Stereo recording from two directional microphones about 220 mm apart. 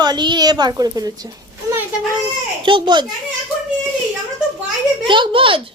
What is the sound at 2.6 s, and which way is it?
Speech, 20° right (ahead or behind).